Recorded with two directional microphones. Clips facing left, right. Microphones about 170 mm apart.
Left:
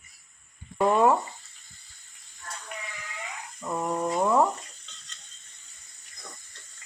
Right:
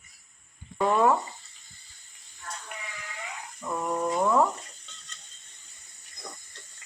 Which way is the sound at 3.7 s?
15° left (ahead or behind).